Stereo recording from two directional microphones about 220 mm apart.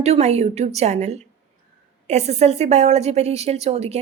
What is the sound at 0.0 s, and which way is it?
A woman's voice, 30° right (ahead or behind).